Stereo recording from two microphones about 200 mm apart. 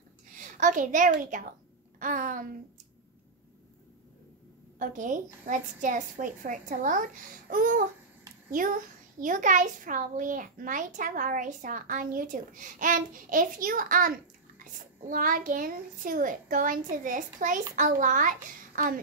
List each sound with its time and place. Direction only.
0.4 s a child's voice: 40° right (ahead or behind)
4.7 s a child's voice: 40° right (ahead or behind)